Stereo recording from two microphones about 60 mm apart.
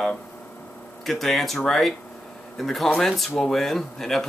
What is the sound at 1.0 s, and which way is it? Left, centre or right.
Speech, centre.